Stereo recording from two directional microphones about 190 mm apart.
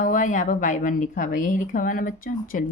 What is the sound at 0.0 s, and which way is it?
A woman's voice, 45° left (ahead or behind).